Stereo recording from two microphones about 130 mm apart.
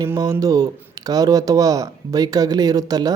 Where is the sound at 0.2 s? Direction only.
25° right (ahead or behind).